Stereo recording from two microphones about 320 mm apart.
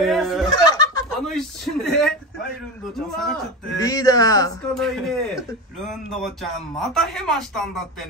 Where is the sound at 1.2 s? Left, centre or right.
Centre.